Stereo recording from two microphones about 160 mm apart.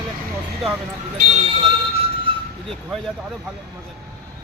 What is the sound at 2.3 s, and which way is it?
Vehicle, 35° right (ahead or behind).